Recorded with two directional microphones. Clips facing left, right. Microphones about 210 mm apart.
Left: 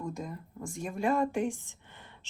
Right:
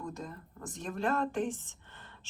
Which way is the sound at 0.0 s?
10° left (ahead or behind).